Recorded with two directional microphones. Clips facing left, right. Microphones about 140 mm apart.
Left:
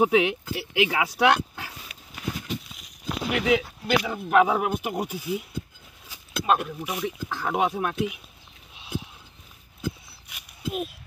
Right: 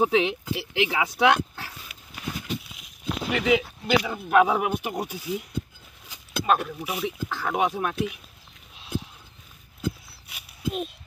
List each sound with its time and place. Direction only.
0.0 s speech: 10° left (ahead or behind)
3.3 s speech: centre (ahead or behind)
8.7 s a sound: centre (ahead or behind)